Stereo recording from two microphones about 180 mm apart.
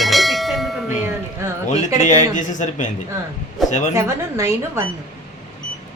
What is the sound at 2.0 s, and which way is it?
Speech, 40° left (ahead or behind).